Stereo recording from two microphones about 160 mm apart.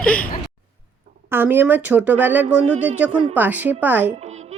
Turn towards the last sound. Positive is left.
turn(degrees=-10)  # may be behind; listen again after turning